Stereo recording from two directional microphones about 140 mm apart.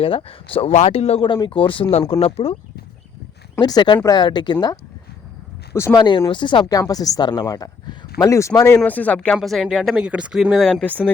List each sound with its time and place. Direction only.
0.0 s speech: 40° left (ahead or behind)
3.6 s speech: 30° left (ahead or behind)
5.7 s speech: 20° left (ahead or behind)
6.0 s speech: 35° left (ahead or behind)
8.8 s speech: 10° left (ahead or behind)